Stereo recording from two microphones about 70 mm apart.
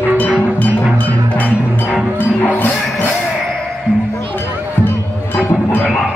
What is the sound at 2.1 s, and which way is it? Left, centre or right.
Music, left.